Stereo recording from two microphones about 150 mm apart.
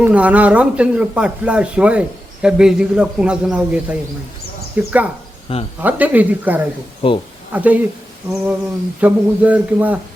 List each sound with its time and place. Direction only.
0.0 s speech: 10° right (ahead or behind)
5.5 s speech: 40° left (ahead or behind)
5.8 s speech: 10° right (ahead or behind)
7.0 s speech: 35° left (ahead or behind)
7.5 s speech: 10° right (ahead or behind)
9.0 s speech: 10° right (ahead or behind)